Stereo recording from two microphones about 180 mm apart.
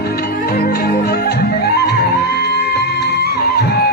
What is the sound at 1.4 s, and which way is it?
Music, 65° left (ahead or behind).